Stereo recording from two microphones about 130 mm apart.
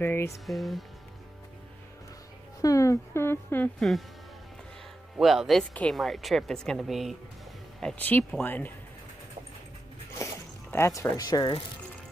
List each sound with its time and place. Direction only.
0.0 s speech: 15° left (ahead or behind)
0.3 s speech: centre (ahead or behind)
2.6 s speech: 25° left (ahead or behind)
5.1 s speech: centre (ahead or behind)
7.8 s speech: 15° left (ahead or behind)
10.1 s zipper: 20° left (ahead or behind)